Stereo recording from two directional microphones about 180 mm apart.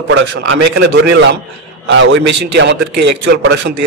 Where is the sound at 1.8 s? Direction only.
85° right.